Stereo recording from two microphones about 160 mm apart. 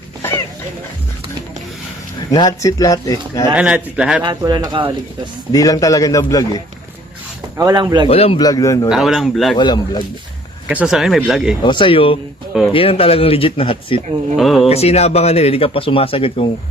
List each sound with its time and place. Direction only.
0.2 s a sound: 15° left (ahead or behind)
2.3 s speech: 25° left (ahead or behind)
3.5 s speech: 5° right (ahead or behind)
4.2 s speech: 25° right (ahead or behind)
5.5 s speech: 20° left (ahead or behind)
7.5 s speech: 25° right (ahead or behind)
8.0 s speech: 40° left (ahead or behind)
8.4 s speech: 25° left (ahead or behind)
8.9 s speech: centre (ahead or behind)
9.6 s speech: 25° left (ahead or behind)
10.7 s speech: 5° right (ahead or behind)
11.6 s speech: 30° left (ahead or behind)
14.3 s speech: centre (ahead or behind)
14.7 s speech: 40° left (ahead or behind)